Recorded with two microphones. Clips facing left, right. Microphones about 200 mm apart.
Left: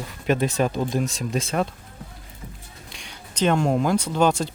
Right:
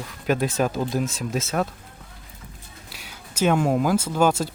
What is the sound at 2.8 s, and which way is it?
Speech, 5° right (ahead or behind).